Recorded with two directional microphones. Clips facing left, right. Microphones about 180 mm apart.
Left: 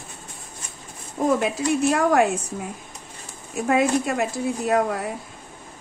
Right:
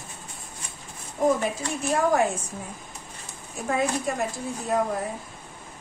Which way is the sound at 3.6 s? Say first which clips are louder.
Left 5 dB; 85° left.